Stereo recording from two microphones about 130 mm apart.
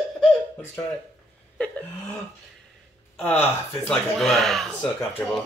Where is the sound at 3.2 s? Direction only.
15° left (ahead or behind).